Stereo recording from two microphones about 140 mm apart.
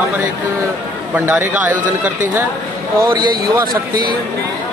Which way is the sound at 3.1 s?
90° right.